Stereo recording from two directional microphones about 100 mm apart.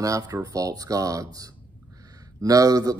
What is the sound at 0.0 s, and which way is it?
Speech, 35° right (ahead or behind).